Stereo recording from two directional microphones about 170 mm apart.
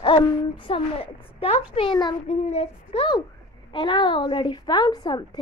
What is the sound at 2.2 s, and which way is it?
A child's voice, 40° left (ahead or behind).